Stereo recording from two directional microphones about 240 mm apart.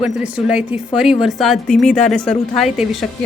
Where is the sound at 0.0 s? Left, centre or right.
Centre.